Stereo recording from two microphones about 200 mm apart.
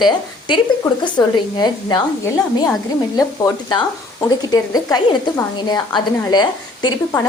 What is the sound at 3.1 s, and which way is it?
A woman's voice, 20° left (ahead or behind).